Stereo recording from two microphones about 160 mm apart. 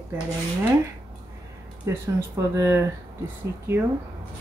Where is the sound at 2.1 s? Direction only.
20° right (ahead or behind).